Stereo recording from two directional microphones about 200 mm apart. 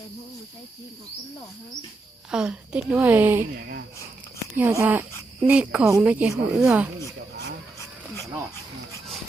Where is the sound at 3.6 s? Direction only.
50° right (ahead or behind).